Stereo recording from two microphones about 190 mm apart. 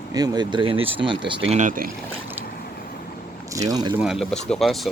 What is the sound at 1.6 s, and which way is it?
Speech, 45° right (ahead or behind).